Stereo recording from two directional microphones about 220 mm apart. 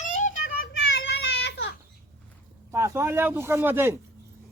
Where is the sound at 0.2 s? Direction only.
40° left (ahead or behind).